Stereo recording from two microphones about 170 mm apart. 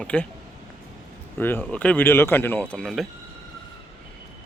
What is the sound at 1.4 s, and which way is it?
Speech, 10° left (ahead or behind).